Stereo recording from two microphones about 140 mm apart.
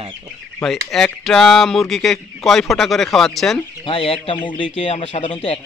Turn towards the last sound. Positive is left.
turn(degrees=40)  # may be behind; listen again after turning